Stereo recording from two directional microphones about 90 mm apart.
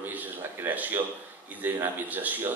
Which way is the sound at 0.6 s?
20° right (ahead or behind).